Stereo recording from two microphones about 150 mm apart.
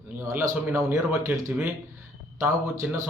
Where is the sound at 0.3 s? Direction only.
15° right (ahead or behind).